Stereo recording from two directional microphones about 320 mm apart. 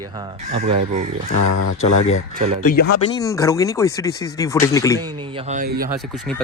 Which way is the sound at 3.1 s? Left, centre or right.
Centre.